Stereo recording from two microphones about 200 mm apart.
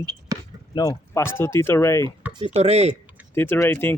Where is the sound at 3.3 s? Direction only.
10° left (ahead or behind).